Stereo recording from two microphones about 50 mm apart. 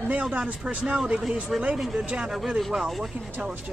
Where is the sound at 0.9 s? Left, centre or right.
Centre.